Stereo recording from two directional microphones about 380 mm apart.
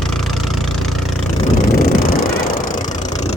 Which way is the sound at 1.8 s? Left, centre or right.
Left.